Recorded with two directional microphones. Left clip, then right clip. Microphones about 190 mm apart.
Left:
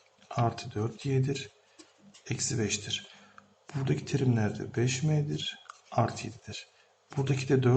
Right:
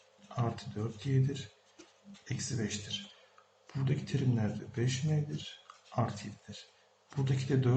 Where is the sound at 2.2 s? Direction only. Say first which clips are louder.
Left 6 dB; 35° left (ahead or behind).